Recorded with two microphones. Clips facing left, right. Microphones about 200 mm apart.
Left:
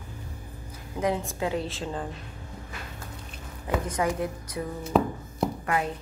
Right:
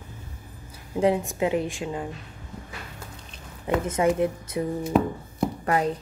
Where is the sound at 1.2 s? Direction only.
20° right (ahead or behind).